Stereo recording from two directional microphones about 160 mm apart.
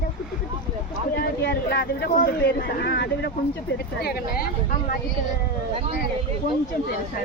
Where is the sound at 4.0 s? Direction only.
75° left (ahead or behind).